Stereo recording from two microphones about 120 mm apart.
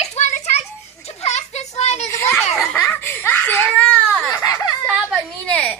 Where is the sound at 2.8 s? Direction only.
15° left (ahead or behind).